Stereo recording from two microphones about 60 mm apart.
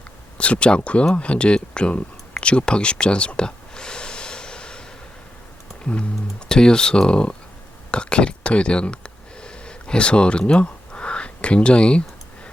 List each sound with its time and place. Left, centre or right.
0.3 s speech: centre
5.8 s typing: centre
6.5 s speech: centre
7.9 s a sound: centre